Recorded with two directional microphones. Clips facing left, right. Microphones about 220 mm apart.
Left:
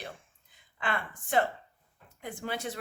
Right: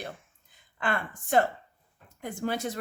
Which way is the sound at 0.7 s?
45° right (ahead or behind).